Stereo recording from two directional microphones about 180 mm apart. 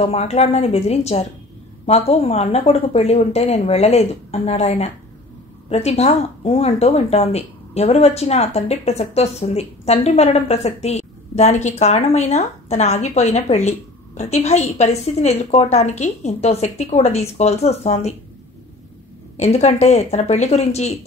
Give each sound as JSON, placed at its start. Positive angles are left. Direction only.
{"t": 0.0, "sound": "speech", "side_deg": 35}
{"t": 19.3, "sound": "speech", "side_deg": 40}